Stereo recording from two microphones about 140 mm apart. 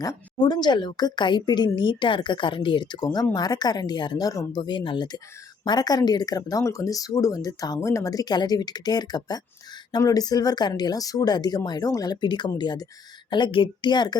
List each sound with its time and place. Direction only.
0.0 s a woman's voice: 30° left (ahead or behind)